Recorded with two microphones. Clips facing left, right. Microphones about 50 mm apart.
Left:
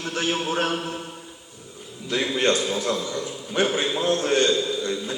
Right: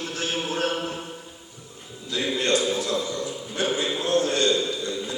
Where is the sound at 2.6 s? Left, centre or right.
Left.